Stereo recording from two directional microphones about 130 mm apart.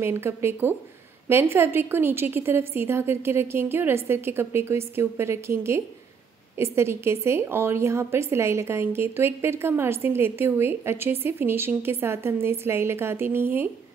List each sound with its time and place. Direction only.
0.0 s a woman's voice: 20° right (ahead or behind)